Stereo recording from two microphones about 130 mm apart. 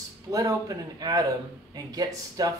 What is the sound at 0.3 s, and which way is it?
Speech, 25° right (ahead or behind).